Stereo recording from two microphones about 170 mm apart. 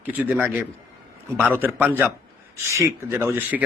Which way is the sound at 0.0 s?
10° right (ahead or behind).